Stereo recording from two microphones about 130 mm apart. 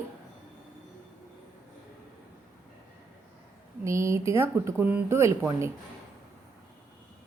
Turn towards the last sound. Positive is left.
turn(degrees=-20)  # may be behind; listen again after turning